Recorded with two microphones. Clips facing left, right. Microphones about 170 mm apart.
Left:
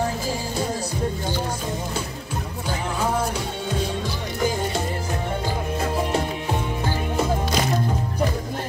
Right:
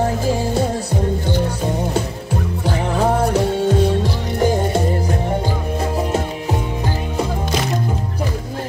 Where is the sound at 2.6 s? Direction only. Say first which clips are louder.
Right 7 dB; 65° right (ahead or behind).